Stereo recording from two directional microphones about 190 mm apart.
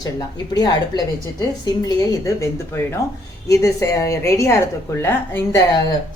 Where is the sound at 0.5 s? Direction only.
20° left (ahead or behind).